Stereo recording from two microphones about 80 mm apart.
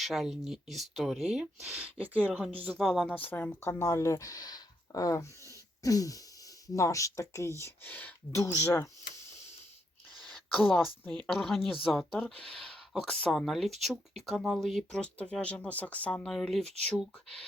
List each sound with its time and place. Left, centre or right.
0.0 s speech: centre
3.1 s speech: left
7.9 s speech: left
8.3 s speech: left
10.6 s speech: centre
16.2 s speech: centre